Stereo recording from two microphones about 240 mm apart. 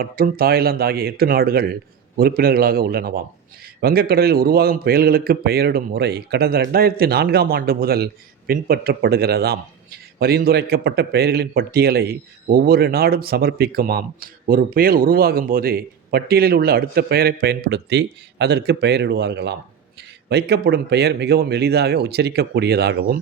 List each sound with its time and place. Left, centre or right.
0.0 s a man's voice: right